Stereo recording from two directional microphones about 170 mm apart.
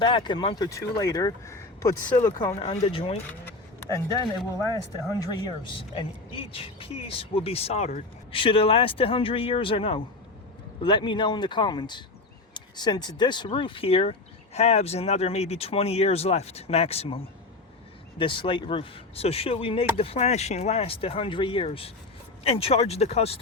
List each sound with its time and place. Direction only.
0.0 s speech: 30° left (ahead or behind)
2.6 s speech: 30° left (ahead or behind)
3.4 s a sound: 20° left (ahead or behind)
5.0 s speech: 20° left (ahead or behind); by 17.2 s 35° left (ahead or behind)
18.2 s speech: 30° left (ahead or behind)